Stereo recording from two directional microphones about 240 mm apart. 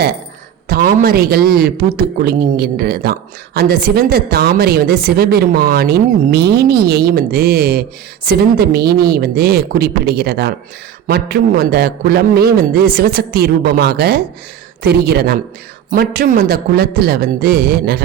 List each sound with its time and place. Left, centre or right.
0.7 s a man's voice: right